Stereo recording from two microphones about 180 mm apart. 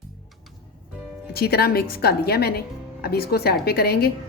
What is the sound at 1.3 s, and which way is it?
A woman's voice, 60° left (ahead or behind).